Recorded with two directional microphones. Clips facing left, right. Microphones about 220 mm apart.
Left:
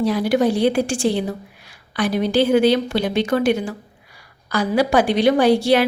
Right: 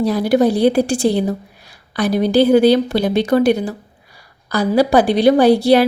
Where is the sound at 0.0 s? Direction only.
40° right (ahead or behind).